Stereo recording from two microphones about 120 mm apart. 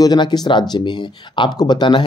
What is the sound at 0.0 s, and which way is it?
Speech, 35° left (ahead or behind).